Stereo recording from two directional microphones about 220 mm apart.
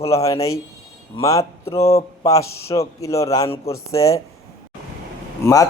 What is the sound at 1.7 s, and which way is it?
Speech, 30° left (ahead or behind).